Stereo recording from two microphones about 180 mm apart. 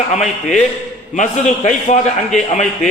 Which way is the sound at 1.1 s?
45° left (ahead or behind).